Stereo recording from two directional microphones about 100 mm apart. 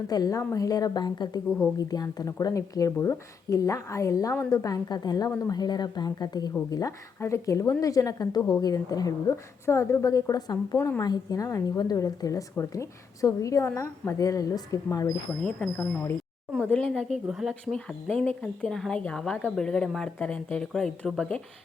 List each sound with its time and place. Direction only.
0.1 s a woman's voice: 40° left (ahead or behind)
10.8 s a woman's voice: 20° left (ahead or behind)
11.0 s a woman's voice: 40° left (ahead or behind)
15.4 s speech: 15° left (ahead or behind)
16.7 s speech: 5° left (ahead or behind)
17.5 s speech: 10° left (ahead or behind)